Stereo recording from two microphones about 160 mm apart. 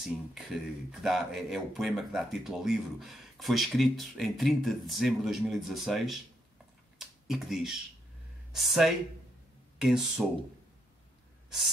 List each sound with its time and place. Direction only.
0.0 s speech: centre (ahead or behind)
7.0 s computer keyboard: centre (ahead or behind)
8.5 s speech: centre (ahead or behind)